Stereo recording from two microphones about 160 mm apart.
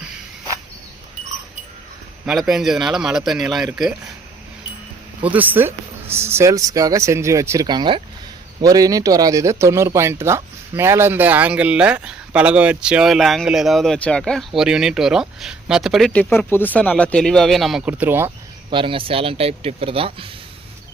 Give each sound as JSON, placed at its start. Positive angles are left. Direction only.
{"t": 2.2, "sound": "speech", "side_deg": 0}
{"t": 5.2, "sound": "speech", "side_deg": -10}
{"t": 16.3, "sound": "speech", "side_deg": 15}
{"t": 18.7, "sound": "speech", "side_deg": -30}